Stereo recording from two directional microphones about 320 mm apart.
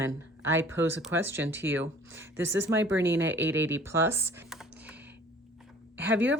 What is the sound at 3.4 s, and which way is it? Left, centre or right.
Speech, centre.